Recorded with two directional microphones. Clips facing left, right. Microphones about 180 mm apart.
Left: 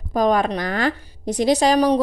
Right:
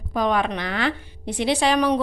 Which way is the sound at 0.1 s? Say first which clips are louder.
Left 4 dB; 40° left (ahead or behind).